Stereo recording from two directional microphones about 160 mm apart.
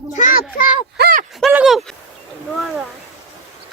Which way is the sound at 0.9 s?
85° right.